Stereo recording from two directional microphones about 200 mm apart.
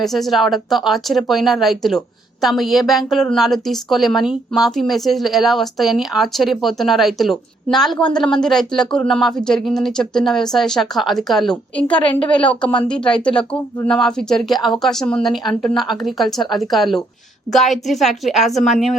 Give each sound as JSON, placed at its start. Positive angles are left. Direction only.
{"t": 0.0, "sound": "a woman's voice", "side_deg": 0}
{"t": 11.9, "sound": "a woman's voice", "side_deg": 25}
{"t": 12.9, "sound": "a woman's voice", "side_deg": 5}